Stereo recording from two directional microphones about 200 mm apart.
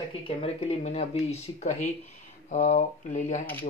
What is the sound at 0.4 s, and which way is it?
Speech, 30° left (ahead or behind).